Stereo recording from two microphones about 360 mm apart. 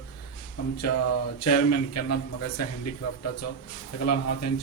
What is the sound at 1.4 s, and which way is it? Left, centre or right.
A man's voice, left.